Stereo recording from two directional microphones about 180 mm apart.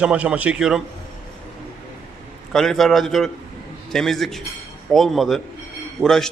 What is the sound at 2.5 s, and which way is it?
A man's voice, 5° left (ahead or behind).